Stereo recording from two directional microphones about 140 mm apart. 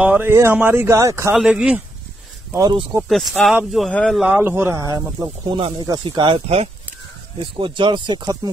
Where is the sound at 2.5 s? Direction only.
25° right (ahead or behind).